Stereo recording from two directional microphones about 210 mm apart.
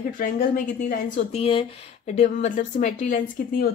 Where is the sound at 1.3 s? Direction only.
25° left (ahead or behind).